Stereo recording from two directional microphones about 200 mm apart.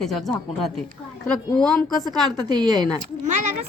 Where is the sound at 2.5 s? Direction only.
20° right (ahead or behind).